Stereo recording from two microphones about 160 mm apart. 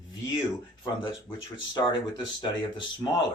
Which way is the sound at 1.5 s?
30° left (ahead or behind).